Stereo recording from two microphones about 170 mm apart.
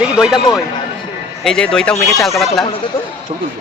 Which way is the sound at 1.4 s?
5° left (ahead or behind).